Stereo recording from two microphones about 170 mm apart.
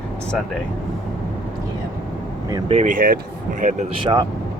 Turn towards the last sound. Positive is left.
turn(degrees=-25)  # may be behind; listen again after turning